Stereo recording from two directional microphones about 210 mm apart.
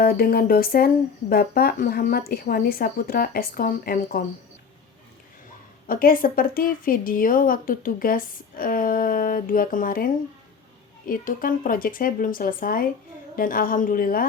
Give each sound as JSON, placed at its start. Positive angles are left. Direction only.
{"t": 0.0, "sound": "speech", "side_deg": 45}
{"t": 5.9, "sound": "a woman's voice", "side_deg": 45}